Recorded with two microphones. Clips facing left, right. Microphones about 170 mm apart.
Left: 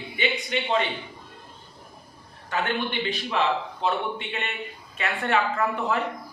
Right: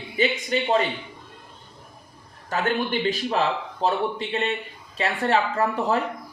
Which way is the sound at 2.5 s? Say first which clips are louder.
Right 3 dB; 45° right (ahead or behind).